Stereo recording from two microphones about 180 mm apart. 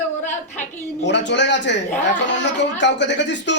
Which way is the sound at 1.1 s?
75° left (ahead or behind).